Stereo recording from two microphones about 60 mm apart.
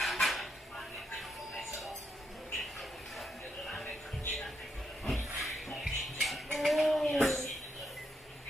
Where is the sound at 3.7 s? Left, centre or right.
Centre.